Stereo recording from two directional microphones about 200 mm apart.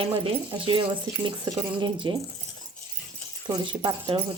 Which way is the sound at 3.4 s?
25° right (ahead or behind).